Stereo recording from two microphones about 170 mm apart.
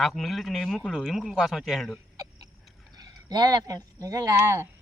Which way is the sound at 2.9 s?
25° right (ahead or behind).